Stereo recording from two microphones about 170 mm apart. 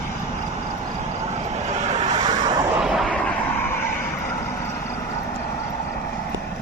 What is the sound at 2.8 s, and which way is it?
Artillery fire, 5° right (ahead or behind).